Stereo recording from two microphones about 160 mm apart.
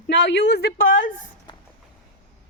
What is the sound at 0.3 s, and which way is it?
Speech, 90° left.